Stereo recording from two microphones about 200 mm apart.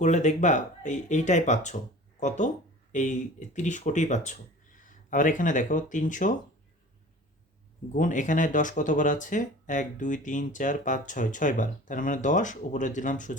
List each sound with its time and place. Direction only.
0.0 s speech: 35° left (ahead or behind)
7.9 s speech: 40° left (ahead or behind)